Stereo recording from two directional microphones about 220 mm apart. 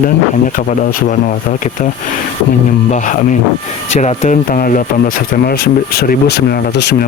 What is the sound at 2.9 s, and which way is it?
Speech, 35° left (ahead or behind).